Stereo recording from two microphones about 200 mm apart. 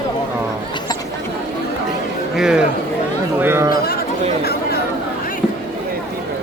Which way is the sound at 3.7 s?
50° left (ahead or behind).